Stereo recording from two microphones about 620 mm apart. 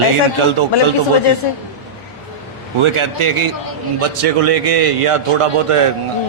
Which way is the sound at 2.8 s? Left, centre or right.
Right.